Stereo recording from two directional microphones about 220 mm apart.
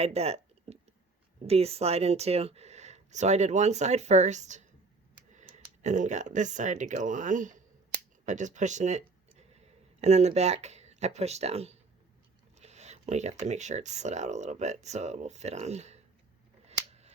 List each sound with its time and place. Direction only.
0.0 s speech: 30° right (ahead or behind)
16.6 s scissors: 30° right (ahead or behind)